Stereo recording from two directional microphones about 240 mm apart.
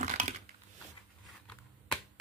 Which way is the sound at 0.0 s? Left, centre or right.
Right.